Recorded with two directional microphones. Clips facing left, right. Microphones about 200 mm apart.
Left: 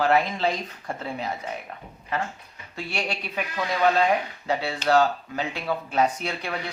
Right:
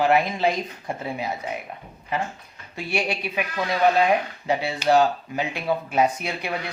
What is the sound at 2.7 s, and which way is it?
Speech, 15° right (ahead or behind).